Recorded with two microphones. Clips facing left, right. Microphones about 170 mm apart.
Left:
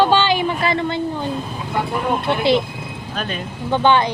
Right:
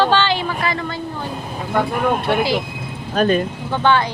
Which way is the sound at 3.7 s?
20° left (ahead or behind).